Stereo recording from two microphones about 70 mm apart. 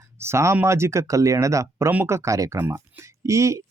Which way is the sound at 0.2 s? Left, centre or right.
Right.